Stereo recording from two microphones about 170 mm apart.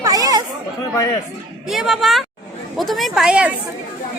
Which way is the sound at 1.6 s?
Centre (ahead or behind).